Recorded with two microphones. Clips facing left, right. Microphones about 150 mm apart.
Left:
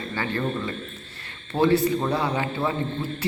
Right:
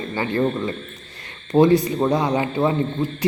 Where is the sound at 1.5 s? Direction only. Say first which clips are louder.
Right 5 dB; 15° right (ahead or behind).